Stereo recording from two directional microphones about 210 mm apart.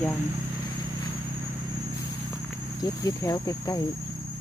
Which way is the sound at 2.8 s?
15° left (ahead or behind).